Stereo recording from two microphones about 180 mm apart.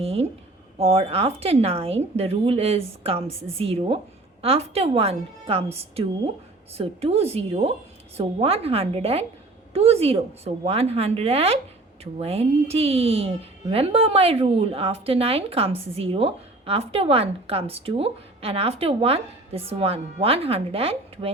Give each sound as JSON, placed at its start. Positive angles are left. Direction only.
{"t": 0.0, "sound": "speech", "side_deg": -35}
{"t": 6.7, "sound": "speech", "side_deg": -35}